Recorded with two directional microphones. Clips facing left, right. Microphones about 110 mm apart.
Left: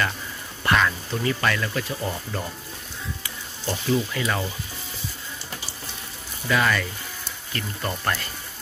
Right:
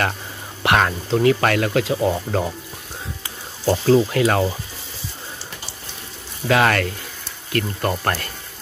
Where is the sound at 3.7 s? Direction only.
90° right; by 4.4 s 70° right (ahead or behind).